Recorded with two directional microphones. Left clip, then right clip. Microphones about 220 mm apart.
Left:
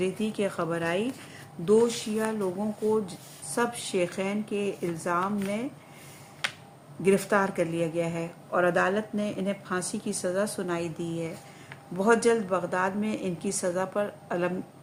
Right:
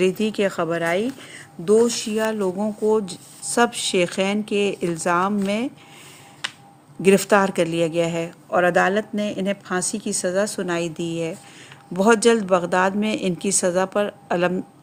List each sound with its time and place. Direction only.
0.0 s a woman's voice: 40° right (ahead or behind)
7.0 s a woman's voice: 40° right (ahead or behind)